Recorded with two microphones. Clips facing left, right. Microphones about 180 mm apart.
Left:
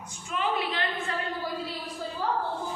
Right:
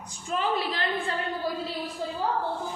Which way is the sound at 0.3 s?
35° right (ahead or behind).